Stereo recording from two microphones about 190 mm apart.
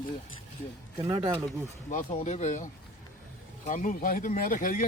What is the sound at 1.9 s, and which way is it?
A man's voice, 35° left (ahead or behind).